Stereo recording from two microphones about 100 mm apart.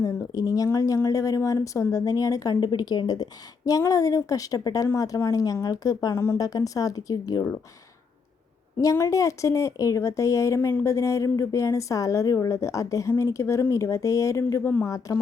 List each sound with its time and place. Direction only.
0.0 s a woman's voice: 35° left (ahead or behind)
8.8 s a woman's voice: 30° left (ahead or behind)